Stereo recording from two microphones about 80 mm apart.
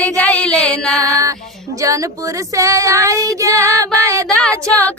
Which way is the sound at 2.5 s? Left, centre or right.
Right.